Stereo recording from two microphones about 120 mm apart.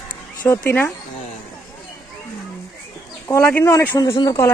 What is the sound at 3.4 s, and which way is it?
Speech, 15° left (ahead or behind).